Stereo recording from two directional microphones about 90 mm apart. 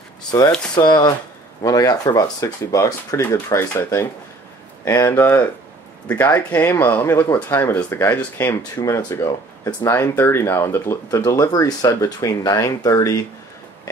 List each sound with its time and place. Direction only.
0.3 s speech: 35° left (ahead or behind)
0.7 s speech: 55° left (ahead or behind)
1.6 s speech: 45° left (ahead or behind); by 8.5 s 20° left (ahead or behind)
8.7 s speech: 35° left (ahead or behind)